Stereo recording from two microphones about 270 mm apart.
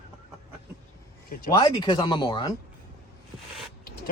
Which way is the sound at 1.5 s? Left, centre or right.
Centre.